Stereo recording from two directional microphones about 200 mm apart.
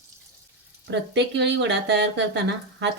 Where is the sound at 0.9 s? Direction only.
60° right (ahead or behind).